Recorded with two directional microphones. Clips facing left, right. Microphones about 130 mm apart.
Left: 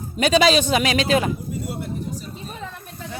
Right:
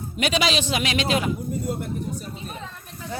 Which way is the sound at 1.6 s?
50° right (ahead or behind).